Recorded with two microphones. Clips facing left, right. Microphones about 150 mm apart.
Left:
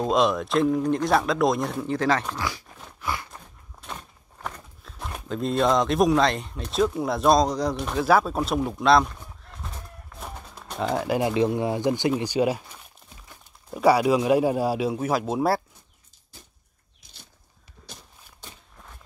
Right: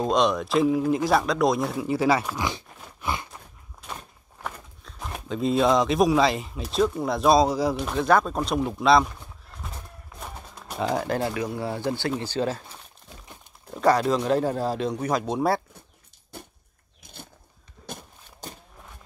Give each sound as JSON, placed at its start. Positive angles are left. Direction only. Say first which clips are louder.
{"t": 0.0, "sound": "speech", "louder": "even", "side_deg": 0}
{"t": 2.4, "sound": "a sound", "louder": "right 2 dB", "side_deg": -20}
{"t": 4.4, "sound": "speech", "louder": "even", "side_deg": 0}
{"t": 10.2, "sound": "pigeon", "louder": "even", "side_deg": 0}
{"t": 11.1, "sound": "a man's voice", "louder": "left 5 dB", "side_deg": 20}
{"t": 13.7, "sound": "a man's voice", "louder": "left 2 dB", "side_deg": 10}
{"t": 16.3, "sound": "a sound", "louder": "right 10 dB", "side_deg": -60}
{"t": 17.8, "sound": "walk", "louder": "right 8 dB", "side_deg": -55}